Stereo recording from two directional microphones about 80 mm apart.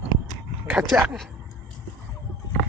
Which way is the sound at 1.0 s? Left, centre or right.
Right.